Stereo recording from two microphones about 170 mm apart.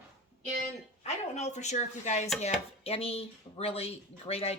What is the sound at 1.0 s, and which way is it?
A woman's voice, 40° left (ahead or behind).